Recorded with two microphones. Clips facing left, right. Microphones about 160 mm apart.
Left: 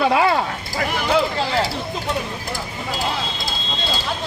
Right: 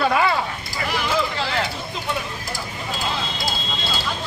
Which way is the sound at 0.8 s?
60° left (ahead or behind).